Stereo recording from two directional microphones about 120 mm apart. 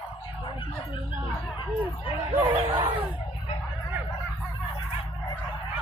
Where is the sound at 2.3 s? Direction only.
45° right (ahead or behind).